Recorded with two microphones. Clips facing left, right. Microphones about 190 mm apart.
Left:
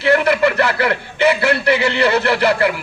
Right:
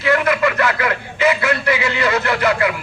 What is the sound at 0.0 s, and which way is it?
A man's voice, 30° left (ahead or behind).